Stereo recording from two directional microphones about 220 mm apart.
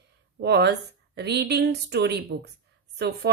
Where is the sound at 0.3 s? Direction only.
50° right (ahead or behind).